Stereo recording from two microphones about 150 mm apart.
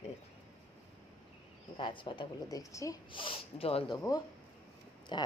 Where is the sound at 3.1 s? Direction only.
35° left (ahead or behind).